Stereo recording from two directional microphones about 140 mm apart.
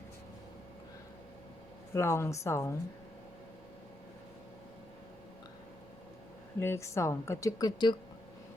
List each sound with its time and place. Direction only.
1.9 s a woman's voice: 20° left (ahead or behind)
6.6 s a woman's voice: 20° left (ahead or behind)